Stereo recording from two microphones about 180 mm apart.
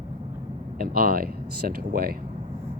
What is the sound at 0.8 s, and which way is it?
Speech, 55° right (ahead or behind).